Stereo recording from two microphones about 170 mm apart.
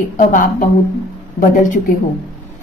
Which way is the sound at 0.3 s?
55° left (ahead or behind).